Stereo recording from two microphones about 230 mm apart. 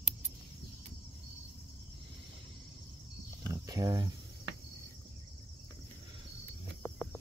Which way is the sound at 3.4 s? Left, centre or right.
Centre.